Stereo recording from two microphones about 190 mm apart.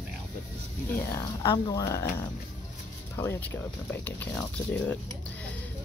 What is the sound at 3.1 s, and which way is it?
Speech, 15° left (ahead or behind).